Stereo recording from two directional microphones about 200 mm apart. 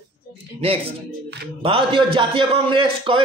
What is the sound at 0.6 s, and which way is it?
Speech, 30° right (ahead or behind).